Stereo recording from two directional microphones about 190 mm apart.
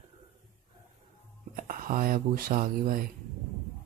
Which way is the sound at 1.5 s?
45° right (ahead or behind).